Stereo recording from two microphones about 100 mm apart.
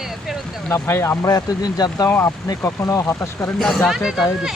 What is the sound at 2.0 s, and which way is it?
Speech, 20° left (ahead or behind).